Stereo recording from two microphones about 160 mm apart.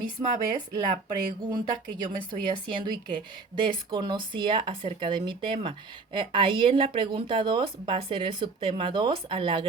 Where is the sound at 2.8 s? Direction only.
25° right (ahead or behind).